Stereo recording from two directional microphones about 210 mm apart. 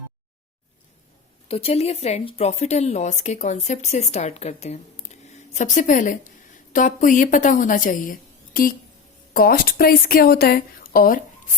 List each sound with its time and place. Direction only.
1.5 s a woman's voice: 30° left (ahead or behind)